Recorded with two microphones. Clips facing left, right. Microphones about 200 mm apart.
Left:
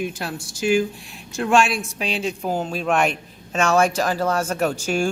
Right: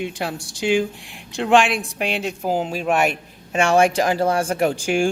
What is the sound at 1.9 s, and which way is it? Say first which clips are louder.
Speech: right 1 dB; 60° right (ahead or behind).